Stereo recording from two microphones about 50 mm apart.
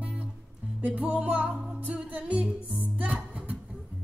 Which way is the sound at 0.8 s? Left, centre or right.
Right.